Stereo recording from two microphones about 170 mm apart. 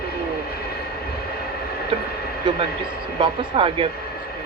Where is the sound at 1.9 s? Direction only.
30° right (ahead or behind).